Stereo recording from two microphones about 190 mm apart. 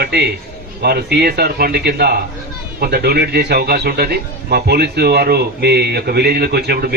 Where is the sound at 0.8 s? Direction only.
55° right (ahead or behind).